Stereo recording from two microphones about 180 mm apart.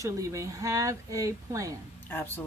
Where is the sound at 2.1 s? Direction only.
10° left (ahead or behind).